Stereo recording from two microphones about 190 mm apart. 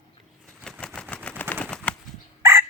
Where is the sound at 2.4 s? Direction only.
15° right (ahead or behind).